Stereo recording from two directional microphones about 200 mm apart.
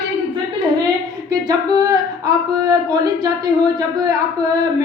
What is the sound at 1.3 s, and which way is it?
Speech, 20° right (ahead or behind).